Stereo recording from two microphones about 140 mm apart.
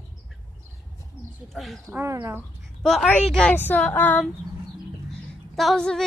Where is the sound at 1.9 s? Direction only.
20° right (ahead or behind).